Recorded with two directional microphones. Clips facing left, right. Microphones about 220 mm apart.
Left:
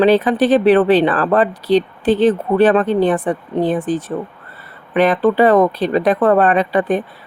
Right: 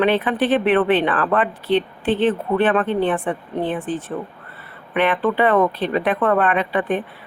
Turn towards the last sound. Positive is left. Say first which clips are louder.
# left 5 dB
turn(degrees=40)  # may be behind; listen again after turning